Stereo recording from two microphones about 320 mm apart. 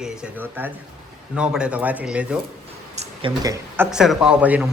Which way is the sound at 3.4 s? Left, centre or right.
Centre.